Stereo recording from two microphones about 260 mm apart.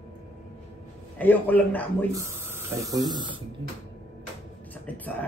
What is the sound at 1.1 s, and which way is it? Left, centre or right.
Speech, centre.